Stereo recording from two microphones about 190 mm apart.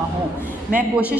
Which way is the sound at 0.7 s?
10° right (ahead or behind).